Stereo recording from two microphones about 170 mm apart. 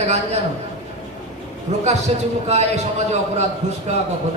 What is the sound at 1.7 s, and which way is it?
Speech, 40° right (ahead or behind).